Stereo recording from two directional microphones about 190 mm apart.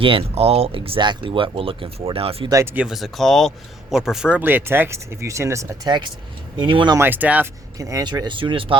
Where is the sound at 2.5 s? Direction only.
10° right (ahead or behind).